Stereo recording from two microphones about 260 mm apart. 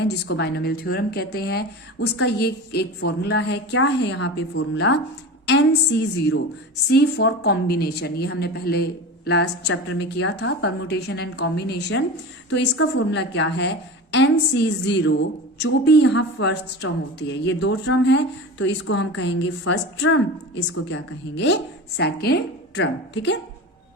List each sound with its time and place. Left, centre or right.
0.0 s a woman's voice: left